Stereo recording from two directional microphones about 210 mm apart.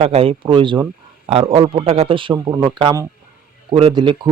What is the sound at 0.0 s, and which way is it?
A man's voice, 25° right (ahead or behind).